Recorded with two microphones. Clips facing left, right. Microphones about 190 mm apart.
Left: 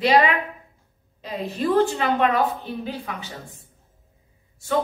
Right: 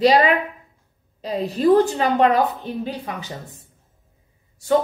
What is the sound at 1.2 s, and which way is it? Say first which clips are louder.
A woman's voice: right 6 dB; 35° right (ahead or behind).